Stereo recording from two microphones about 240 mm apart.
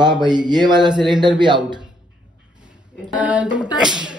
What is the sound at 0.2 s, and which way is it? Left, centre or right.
Speech, centre.